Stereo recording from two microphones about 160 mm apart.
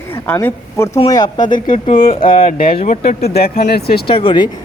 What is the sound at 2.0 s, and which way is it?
Speech, 30° left (ahead or behind).